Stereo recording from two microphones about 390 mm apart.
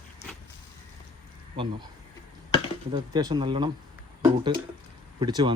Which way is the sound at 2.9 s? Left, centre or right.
Centre.